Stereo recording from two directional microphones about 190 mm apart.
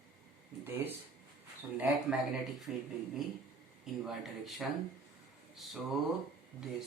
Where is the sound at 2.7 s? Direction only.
5° right (ahead or behind).